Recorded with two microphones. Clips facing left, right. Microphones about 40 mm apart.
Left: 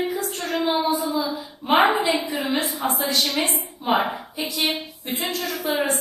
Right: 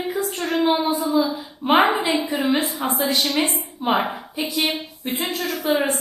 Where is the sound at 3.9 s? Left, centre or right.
Centre.